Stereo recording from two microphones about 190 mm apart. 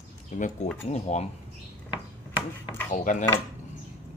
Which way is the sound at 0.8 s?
35° left (ahead or behind).